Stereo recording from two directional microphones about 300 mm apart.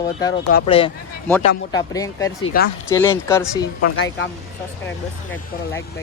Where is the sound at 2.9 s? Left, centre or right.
Centre.